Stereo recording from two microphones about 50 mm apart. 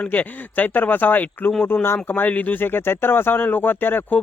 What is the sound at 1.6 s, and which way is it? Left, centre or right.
Speech, left.